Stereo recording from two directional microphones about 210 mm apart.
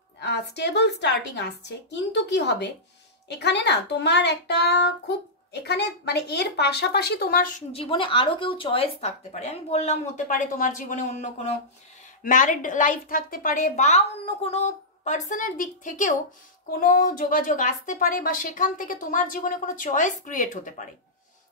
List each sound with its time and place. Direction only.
0.2 s a woman's voice: 55° left (ahead or behind)
7.8 s a woman's voice: 25° left (ahead or behind)